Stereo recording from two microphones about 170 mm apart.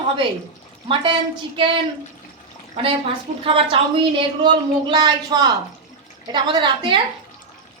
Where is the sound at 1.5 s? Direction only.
30° right (ahead or behind).